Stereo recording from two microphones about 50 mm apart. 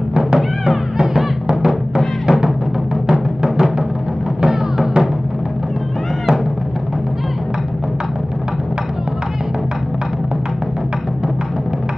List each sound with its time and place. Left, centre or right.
0.1 s music: centre